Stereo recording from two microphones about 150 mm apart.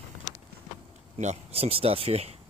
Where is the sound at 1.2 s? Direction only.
45° right (ahead or behind).